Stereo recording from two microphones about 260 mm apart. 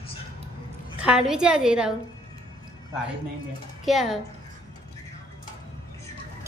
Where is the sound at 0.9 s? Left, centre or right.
Centre.